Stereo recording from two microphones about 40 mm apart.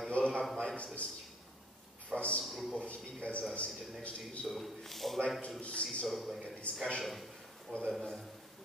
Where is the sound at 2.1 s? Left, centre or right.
Left.